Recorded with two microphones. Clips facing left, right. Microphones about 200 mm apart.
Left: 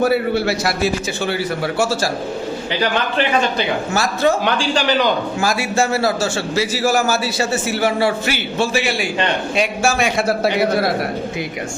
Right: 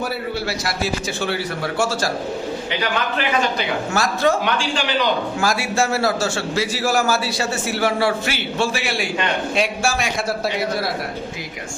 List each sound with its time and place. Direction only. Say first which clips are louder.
0.0 s speech: left 8 dB; 60° left (ahead or behind)
1.8 s a man's voice: left 2 dB; 5° left (ahead or behind)
3.9 s a man's voice: left 1 dB; 5° left (ahead or behind)
4.4 s a man's voice: left 4 dB; 40° left (ahead or behind)
5.4 s a man's voice: left 2 dB; centre (ahead or behind)
10.0 s speech: left 5 dB; 60° left (ahead or behind)